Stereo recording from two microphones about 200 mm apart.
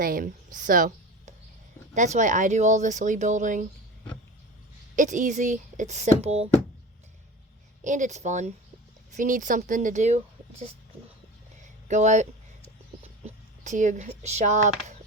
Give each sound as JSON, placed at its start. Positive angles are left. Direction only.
{"t": 0.0, "sound": "a woman's voice", "side_deg": -45}
{"t": 4.9, "sound": "speech", "side_deg": -40}
{"t": 7.9, "sound": "speech", "side_deg": -40}
{"t": 11.9, "sound": "speech", "side_deg": -35}